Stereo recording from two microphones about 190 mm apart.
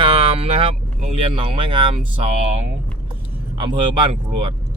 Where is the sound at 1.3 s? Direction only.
30° right (ahead or behind).